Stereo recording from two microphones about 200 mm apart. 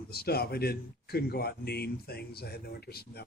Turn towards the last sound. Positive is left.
turn(degrees=50)  # may be behind; listen again after turning